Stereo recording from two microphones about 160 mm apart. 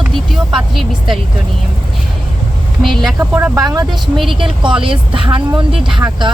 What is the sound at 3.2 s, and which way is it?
Speech, 15° right (ahead or behind).